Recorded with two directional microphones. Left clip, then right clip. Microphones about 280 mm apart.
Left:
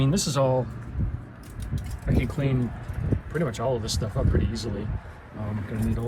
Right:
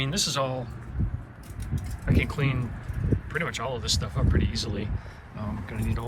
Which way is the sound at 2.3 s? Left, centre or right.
Centre.